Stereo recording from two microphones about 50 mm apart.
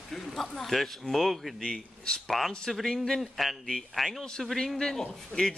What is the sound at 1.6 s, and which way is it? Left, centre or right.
Speech, centre.